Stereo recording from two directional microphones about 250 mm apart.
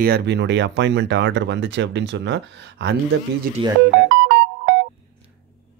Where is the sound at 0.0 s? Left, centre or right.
Right.